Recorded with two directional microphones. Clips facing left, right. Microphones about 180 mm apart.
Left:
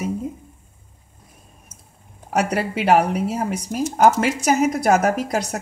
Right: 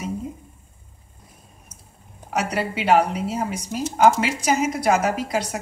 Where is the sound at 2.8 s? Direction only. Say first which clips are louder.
Left 2 dB; 50° left (ahead or behind).